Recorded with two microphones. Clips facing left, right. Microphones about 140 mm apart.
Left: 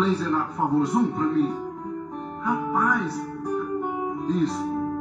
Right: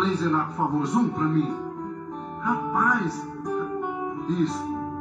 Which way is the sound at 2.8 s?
Centre (ahead or behind).